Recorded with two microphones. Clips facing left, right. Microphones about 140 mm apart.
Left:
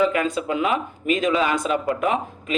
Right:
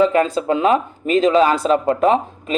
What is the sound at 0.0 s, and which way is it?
A man's voice, 35° right (ahead or behind).